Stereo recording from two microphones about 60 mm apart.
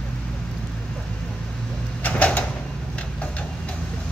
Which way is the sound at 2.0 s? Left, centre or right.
Left.